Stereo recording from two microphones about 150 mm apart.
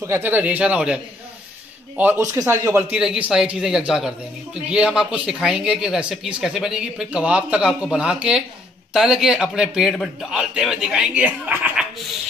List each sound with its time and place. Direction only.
0.0 s a man's voice: 15° right (ahead or behind)
3.0 s speech: 5° right (ahead or behind)